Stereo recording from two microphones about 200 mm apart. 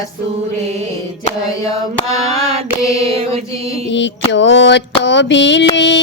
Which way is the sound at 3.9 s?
65° left (ahead or behind).